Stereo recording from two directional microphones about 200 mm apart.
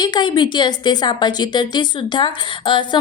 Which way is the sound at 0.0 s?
20° left (ahead or behind).